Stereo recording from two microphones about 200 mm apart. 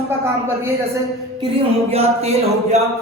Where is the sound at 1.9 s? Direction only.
30° right (ahead or behind).